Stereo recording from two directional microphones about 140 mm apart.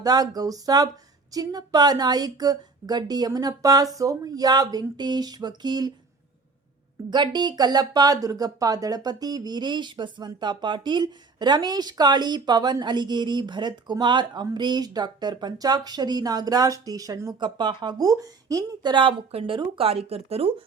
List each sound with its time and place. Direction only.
0.0 s speech: 25° right (ahead or behind)
7.1 s speech: 30° right (ahead or behind)